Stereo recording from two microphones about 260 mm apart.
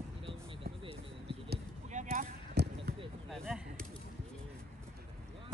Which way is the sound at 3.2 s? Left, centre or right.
Centre.